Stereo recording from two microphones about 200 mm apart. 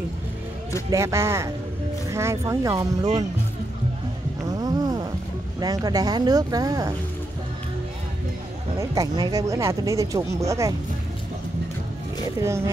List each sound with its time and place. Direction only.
0.8 s speech: 15° right (ahead or behind)
4.5 s a sound: 20° right (ahead or behind)
5.6 s speech: 20° right (ahead or behind)
8.7 s speech: 15° right (ahead or behind)
12.4 s speech: 15° right (ahead or behind)